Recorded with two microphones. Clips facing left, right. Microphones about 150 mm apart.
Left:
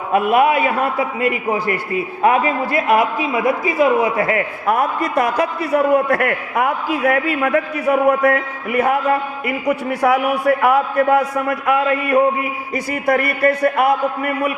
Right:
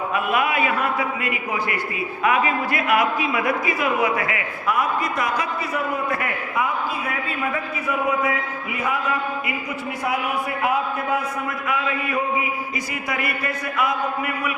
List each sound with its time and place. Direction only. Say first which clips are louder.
0.1 s a man's voice: left 10 dB; 45° left (ahead or behind)
0.4 s speech: left 6 dB; 35° left (ahead or behind)
4.6 s a man's voice: left 2 dB; 55° left (ahead or behind)